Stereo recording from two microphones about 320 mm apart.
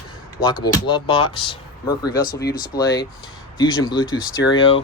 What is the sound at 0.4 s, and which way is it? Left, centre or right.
Speech, centre.